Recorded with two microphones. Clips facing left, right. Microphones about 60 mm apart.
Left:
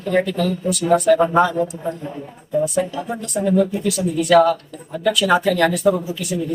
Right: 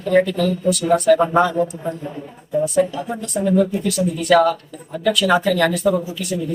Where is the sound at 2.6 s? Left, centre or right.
Centre.